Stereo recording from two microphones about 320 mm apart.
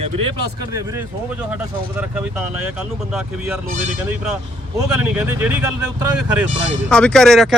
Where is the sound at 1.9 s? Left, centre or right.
Centre.